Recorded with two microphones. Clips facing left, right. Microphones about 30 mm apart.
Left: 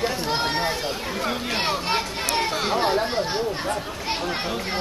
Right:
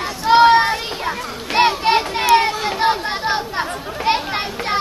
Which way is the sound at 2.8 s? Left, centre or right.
Right.